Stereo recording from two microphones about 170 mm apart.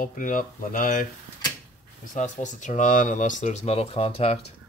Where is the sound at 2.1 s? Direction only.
45° left (ahead or behind).